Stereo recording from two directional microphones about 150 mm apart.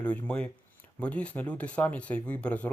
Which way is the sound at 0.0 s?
10° left (ahead or behind).